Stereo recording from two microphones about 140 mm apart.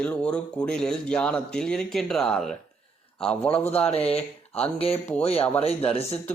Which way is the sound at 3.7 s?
45° left (ahead or behind).